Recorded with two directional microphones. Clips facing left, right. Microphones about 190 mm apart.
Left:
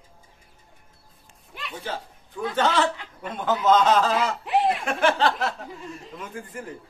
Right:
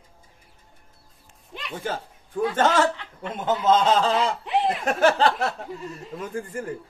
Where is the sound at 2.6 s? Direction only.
45° right (ahead or behind).